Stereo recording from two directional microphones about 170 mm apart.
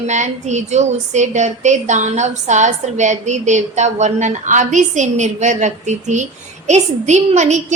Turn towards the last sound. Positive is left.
turn(degrees=-45)  # may be behind; listen again after turning